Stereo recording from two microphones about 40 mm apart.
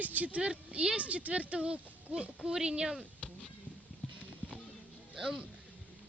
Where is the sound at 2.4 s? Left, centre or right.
Centre.